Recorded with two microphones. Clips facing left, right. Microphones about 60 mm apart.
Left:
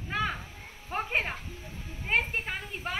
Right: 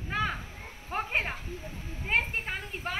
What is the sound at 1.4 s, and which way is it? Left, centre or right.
Speech, right.